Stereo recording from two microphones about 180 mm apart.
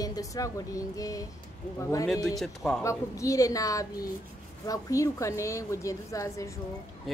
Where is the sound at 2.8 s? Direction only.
20° left (ahead or behind).